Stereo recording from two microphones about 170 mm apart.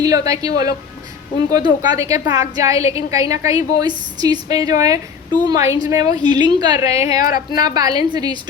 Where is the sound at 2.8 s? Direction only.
35° left (ahead or behind).